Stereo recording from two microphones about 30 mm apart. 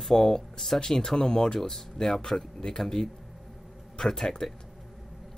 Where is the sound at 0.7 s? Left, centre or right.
Left.